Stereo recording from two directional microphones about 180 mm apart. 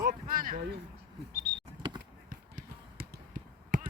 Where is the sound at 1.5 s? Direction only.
55° right (ahead or behind).